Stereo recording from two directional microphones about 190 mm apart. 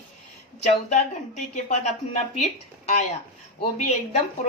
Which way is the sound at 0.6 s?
40° left (ahead or behind).